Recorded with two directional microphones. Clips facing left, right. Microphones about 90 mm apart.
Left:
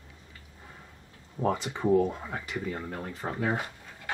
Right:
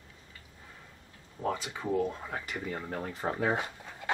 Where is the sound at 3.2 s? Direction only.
20° right (ahead or behind).